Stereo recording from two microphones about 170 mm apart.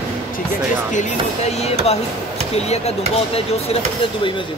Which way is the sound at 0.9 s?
45° left (ahead or behind).